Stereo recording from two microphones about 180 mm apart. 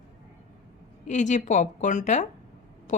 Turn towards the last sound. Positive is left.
turn(degrees=45)  # may be behind; listen again after turning